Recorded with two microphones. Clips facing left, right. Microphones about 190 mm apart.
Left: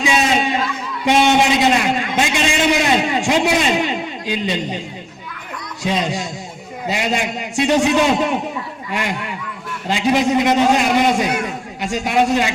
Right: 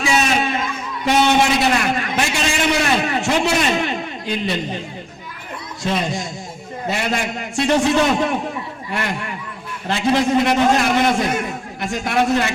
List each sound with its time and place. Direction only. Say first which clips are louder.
0.0 s a sound: left 1 dB; 20° left (ahead or behind)
1.0 s a man's voice: left 1 dB; 15° left (ahead or behind)
5.8 s a man's voice: left 1 dB; 15° left (ahead or behind)